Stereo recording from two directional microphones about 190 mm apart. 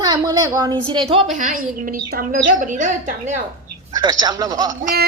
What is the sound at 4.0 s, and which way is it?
Speech, 20° right (ahead or behind).